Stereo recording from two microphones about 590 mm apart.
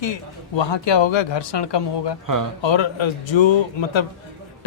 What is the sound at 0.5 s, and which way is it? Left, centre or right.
Speech, left.